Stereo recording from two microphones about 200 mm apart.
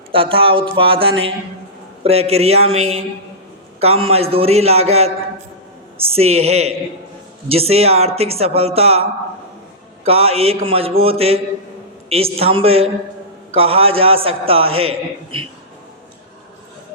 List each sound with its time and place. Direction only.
0.1 s mantra: 25° right (ahead or behind)
2.0 s speech: 30° right (ahead or behind)
10.0 s mantra: 30° right (ahead or behind)
14.7 s a man's voice: 90° right